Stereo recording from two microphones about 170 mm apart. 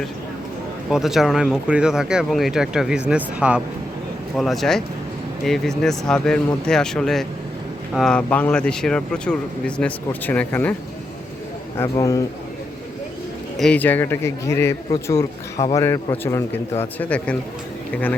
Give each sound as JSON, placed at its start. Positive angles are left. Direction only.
{"t": 0.9, "sound": "speech", "side_deg": 0}
{"t": 11.8, "sound": "a man's voice", "side_deg": 20}
{"t": 13.6, "sound": "a man's voice", "side_deg": 5}